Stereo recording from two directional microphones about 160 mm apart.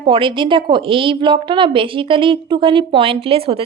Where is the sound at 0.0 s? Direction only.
35° right (ahead or behind).